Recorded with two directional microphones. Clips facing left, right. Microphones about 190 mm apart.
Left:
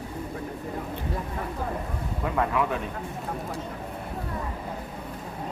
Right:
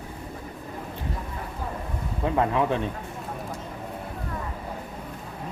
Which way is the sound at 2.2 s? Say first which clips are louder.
Right 3 dB; 25° right (ahead or behind).